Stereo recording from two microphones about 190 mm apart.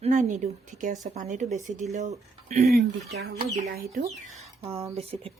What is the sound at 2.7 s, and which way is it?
Speech, 55° right (ahead or behind).